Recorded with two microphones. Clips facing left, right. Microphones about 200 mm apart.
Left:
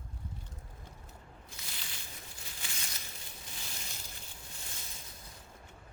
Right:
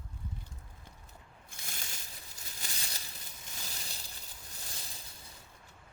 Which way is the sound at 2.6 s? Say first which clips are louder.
Right 1 dB; 40° right (ahead or behind).